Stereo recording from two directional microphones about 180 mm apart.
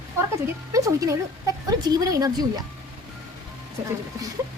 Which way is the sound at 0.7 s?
20° right (ahead or behind).